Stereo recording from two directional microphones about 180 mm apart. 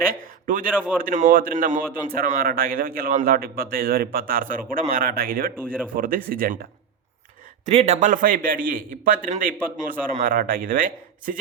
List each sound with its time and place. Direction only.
0.1 s a sound: 50° right (ahead or behind)
0.7 s speech: 10° right (ahead or behind)
1.0 s a man's voice: 45° right (ahead or behind)
7.6 s a man's voice: 35° right (ahead or behind)